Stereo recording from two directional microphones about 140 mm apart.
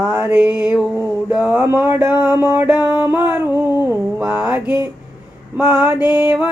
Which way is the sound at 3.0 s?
15° right (ahead or behind).